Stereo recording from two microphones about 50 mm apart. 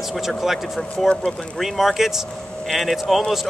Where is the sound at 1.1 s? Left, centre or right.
Centre.